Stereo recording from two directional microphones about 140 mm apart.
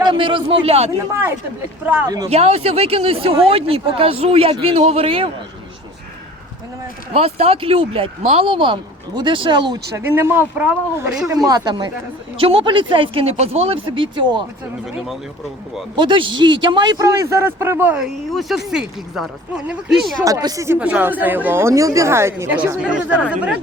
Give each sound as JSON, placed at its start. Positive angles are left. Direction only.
{"t": 0.0, "sound": "a man's voice", "side_deg": -35}
{"t": 1.1, "sound": "speech", "side_deg": -15}
{"t": 2.0, "sound": "a man's voice", "side_deg": -25}
{"t": 2.3, "sound": "speech", "side_deg": -45}
{"t": 7.1, "sound": "speech", "side_deg": -45}
{"t": 10.2, "sound": "a man's voice", "side_deg": -15}
{"t": 16.0, "sound": "a man's voice", "side_deg": -35}
{"t": 20.2, "sound": "a man's voice", "side_deg": -25}
{"t": 20.7, "sound": "speech", "side_deg": -10}